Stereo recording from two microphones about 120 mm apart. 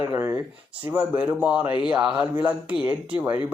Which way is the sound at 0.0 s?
20° right (ahead or behind).